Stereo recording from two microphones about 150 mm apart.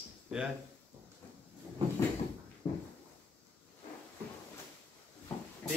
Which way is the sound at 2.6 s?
30° left (ahead or behind).